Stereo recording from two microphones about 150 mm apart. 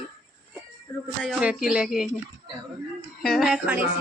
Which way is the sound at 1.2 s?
5° right (ahead or behind).